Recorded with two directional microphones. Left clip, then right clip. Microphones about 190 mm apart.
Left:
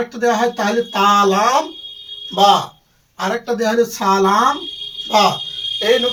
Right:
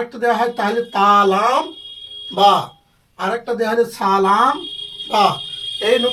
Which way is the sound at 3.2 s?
20° right (ahead or behind).